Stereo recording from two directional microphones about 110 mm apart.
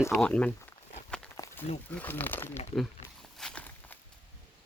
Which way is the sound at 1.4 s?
30° left (ahead or behind).